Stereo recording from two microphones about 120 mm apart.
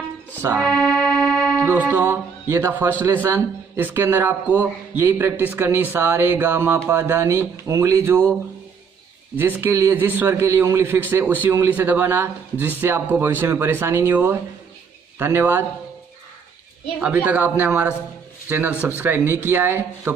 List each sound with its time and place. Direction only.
0.6 s music: 5° left (ahead or behind)
1.6 s a man's voice: 15° right (ahead or behind)
9.4 s a man's voice: 20° right (ahead or behind)
17.0 s speech: 10° right (ahead or behind)